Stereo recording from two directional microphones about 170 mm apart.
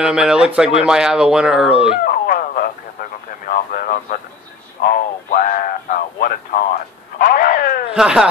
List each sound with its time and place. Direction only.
0.0 s speech: 5° right (ahead or behind)
2.0 s radio: 60° left (ahead or behind)
4.8 s a sound: 55° left (ahead or behind)
7.9 s speech: 5° right (ahead or behind)